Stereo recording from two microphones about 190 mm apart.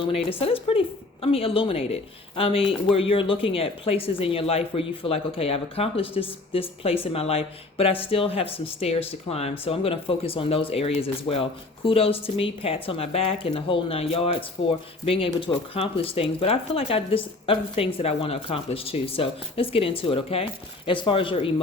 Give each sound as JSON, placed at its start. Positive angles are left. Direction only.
{"t": 0.3, "sound": "speech", "side_deg": 30}